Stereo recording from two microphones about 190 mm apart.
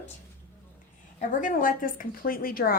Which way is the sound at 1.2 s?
45° left (ahead or behind).